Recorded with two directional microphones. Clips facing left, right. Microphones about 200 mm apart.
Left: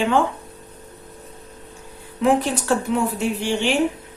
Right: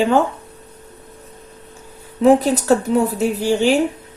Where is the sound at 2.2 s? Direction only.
40° right (ahead or behind).